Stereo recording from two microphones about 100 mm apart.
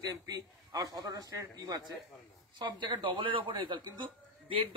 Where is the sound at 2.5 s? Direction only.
50° right (ahead or behind).